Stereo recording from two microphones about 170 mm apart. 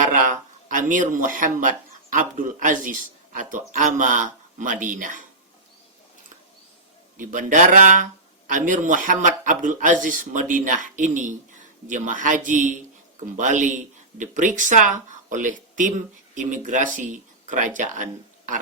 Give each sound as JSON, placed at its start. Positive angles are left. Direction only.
{"t": 0.1, "sound": "speech", "side_deg": -50}
{"t": 7.2, "sound": "speech", "side_deg": -50}